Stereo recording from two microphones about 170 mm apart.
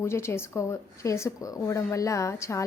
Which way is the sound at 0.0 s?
15° left (ahead or behind).